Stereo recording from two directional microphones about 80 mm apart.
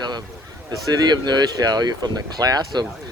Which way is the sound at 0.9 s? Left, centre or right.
Right.